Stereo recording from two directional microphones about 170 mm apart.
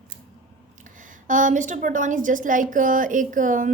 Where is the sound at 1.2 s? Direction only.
50° right (ahead or behind).